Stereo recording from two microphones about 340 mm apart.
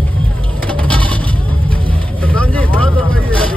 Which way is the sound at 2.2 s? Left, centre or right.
Centre.